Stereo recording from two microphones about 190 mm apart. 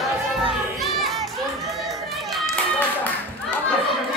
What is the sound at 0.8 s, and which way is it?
Music, centre (ahead or behind).